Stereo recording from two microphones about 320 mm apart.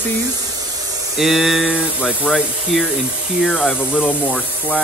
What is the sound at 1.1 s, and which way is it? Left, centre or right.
Speech, centre.